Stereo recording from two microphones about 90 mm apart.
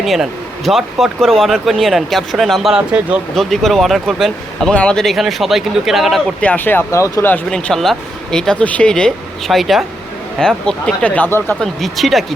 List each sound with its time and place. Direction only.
0.0 s speech: centre (ahead or behind)
6.4 s speech: 20° left (ahead or behind)
7.5 s speech: 5° left (ahead or behind)
11.3 s speech: 25° left (ahead or behind)
11.6 s speech: centre (ahead or behind)